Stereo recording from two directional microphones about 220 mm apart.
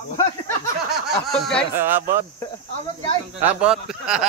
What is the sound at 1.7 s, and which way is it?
Speech, 10° right (ahead or behind).